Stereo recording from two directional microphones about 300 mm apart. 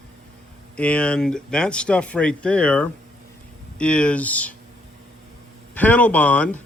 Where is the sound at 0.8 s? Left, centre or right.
Centre.